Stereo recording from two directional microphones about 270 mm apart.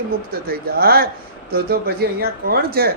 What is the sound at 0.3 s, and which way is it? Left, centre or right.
Speech, right.